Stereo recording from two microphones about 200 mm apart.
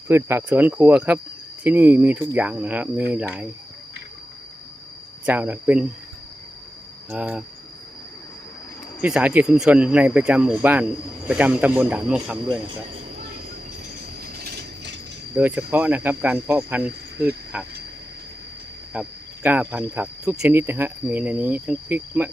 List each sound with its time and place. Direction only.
0.1 s speech: 10° right (ahead or behind)
5.2 s speech: 10° right (ahead or behind)
7.1 s speech: 5° right (ahead or behind)
9.0 s speech: 5° right (ahead or behind)
14.3 s train: 55° right (ahead or behind)
15.4 s speech: 10° right (ahead or behind)
18.9 s speech: 5° right (ahead or behind)